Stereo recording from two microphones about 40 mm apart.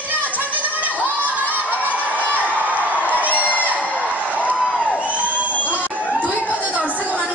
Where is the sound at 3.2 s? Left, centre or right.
Left.